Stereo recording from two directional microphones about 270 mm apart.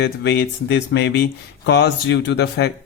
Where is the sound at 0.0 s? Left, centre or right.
Left.